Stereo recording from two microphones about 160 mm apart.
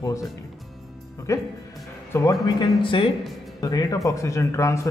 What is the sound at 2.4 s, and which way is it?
Speech, 30° left (ahead or behind).